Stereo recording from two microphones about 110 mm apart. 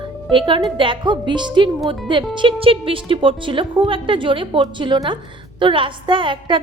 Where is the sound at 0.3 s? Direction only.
50° right (ahead or behind).